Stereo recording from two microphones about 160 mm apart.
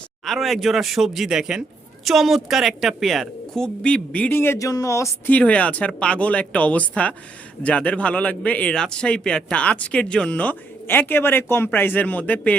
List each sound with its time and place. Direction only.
0.3 s a woman's voice: centre (ahead or behind)